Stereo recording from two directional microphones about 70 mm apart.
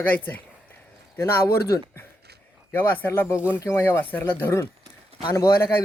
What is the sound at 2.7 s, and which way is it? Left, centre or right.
A man's voice, left.